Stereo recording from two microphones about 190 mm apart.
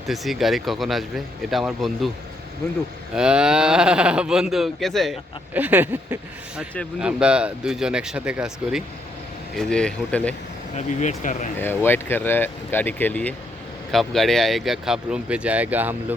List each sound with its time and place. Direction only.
0.1 s speech: centre (ahead or behind)
3.2 s speech: 5° right (ahead or behind)
10.8 s speech: 40° left (ahead or behind)
11.6 s speech: 10° left (ahead or behind); by 16.1 s 10° right (ahead or behind)